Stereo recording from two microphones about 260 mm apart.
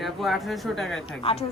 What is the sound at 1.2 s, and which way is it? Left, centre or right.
Speech, left.